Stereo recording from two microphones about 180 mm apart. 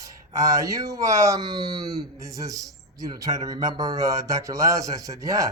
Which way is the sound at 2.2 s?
20° right (ahead or behind).